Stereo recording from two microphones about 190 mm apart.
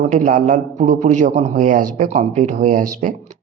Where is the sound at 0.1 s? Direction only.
40° right (ahead or behind).